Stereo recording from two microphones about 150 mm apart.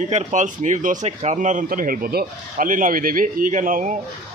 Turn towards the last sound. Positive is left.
turn(degrees=-60)  # may be behind; listen again after turning